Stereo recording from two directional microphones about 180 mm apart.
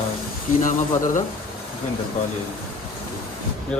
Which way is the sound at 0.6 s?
45° left (ahead or behind).